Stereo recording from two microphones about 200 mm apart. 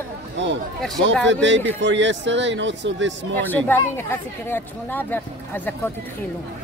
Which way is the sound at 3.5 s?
10° left (ahead or behind).